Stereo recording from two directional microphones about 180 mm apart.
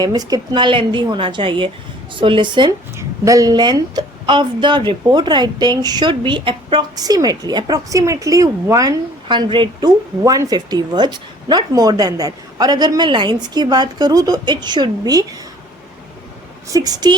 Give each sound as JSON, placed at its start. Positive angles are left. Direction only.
{"t": 0.0, "sound": "speech", "side_deg": -20}
{"t": 16.6, "sound": "speech", "side_deg": -20}